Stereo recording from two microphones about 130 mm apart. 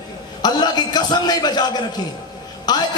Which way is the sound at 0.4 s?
35° left (ahead or behind).